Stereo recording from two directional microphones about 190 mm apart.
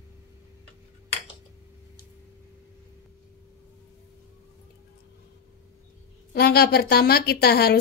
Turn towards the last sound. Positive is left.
turn(degrees=55)  # may be behind; listen again after turning